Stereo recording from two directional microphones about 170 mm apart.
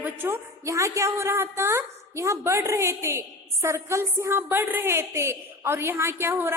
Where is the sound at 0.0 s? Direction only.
15° right (ahead or behind).